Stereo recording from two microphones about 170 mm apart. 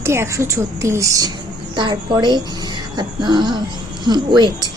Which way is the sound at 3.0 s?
25° right (ahead or behind).